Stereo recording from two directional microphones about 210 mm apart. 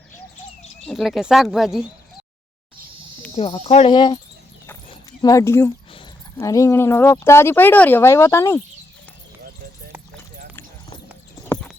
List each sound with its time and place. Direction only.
0.9 s speech: centre (ahead or behind)
3.3 s speech: 25° left (ahead or behind)
4.9 s a sound: 15° left (ahead or behind)
6.4 s speech: 15° left (ahead or behind)
11.4 s clip-clop: 5° left (ahead or behind)